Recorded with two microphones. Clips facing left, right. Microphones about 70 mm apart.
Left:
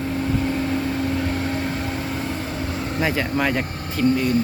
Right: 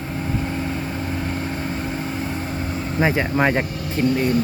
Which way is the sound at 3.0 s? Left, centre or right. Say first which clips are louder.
Right 3 dB; right.